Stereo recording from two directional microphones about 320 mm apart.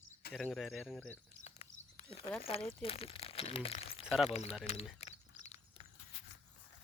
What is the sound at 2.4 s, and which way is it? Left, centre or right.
Speech, centre.